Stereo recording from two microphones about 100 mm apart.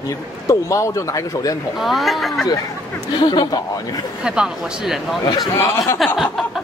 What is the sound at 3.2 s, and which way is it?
Speech, 50° left (ahead or behind).